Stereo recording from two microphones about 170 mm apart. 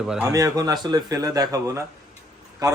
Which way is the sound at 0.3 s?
20° right (ahead or behind).